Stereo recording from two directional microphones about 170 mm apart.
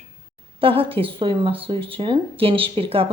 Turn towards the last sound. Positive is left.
turn(degrees=-35)  # may be behind; listen again after turning